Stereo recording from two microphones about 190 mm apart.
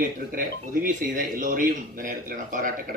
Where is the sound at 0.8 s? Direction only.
45° right (ahead or behind).